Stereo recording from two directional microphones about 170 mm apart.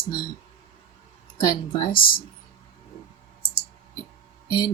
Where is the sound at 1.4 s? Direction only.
25° left (ahead or behind).